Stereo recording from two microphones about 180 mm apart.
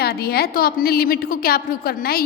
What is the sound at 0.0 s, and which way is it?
A woman's voice, 60° left (ahead or behind).